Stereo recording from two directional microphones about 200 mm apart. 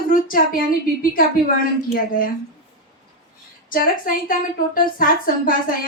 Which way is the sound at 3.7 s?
45° left (ahead or behind).